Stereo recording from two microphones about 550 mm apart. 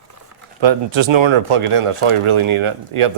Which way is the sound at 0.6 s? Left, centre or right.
Right.